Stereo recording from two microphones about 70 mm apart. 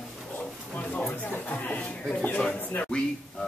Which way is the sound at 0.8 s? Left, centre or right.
Centre.